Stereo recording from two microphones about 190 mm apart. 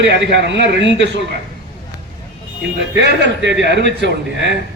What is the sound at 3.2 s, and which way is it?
A man's voice, 65° right (ahead or behind).